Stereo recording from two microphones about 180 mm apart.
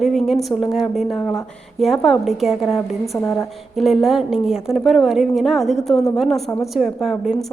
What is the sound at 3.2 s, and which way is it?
Speech, 15° left (ahead or behind).